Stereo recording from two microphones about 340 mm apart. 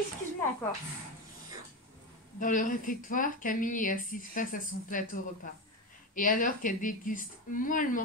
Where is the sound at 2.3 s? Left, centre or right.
Left.